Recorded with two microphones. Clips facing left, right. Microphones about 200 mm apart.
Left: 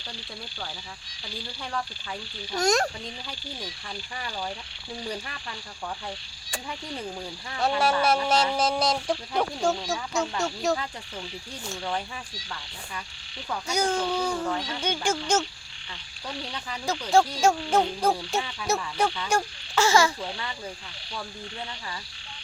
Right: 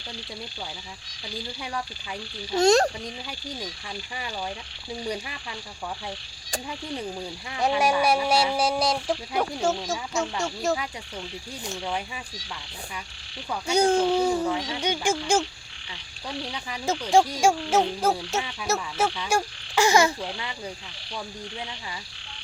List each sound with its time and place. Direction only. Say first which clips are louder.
2.5 s speech: right 5 dB; 25° right (ahead or behind)
5.0 s speech: right 3 dB; 10° right (ahead or behind)
7.5 s speech: right 1 dB; 15° right (ahead or behind)
11.6 s speech: even; 10° right (ahead or behind)
13.7 s speech: right 6 dB; 30° right (ahead or behind)